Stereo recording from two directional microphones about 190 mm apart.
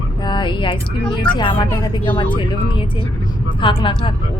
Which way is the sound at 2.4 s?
25° left (ahead or behind).